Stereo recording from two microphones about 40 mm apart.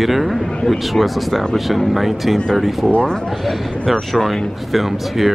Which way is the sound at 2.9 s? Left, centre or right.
Left.